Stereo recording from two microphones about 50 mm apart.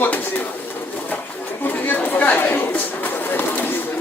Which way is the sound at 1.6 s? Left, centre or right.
Left.